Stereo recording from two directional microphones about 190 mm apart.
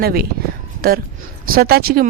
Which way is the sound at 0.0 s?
55° right (ahead or behind).